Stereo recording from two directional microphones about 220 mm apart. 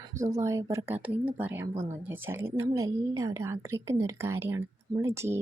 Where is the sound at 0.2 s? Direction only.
15° right (ahead or behind).